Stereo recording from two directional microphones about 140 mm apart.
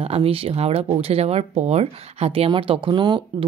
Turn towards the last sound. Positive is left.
turn(degrees=-35)  # may be behind; listen again after turning